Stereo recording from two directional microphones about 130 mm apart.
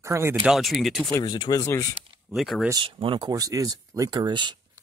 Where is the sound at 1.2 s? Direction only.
35° left (ahead or behind).